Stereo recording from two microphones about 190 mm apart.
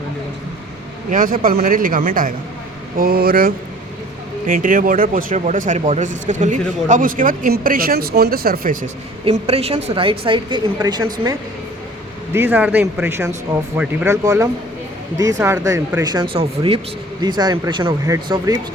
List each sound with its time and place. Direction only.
1.1 s speech: 45° right (ahead or behind)
9.2 s speech: 30° right (ahead or behind); by 16.2 s 15° right (ahead or behind)
16.2 s speech: 30° right (ahead or behind)